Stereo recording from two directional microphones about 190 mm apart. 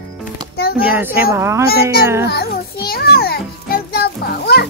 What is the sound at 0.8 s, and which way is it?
Speech, 10° right (ahead or behind).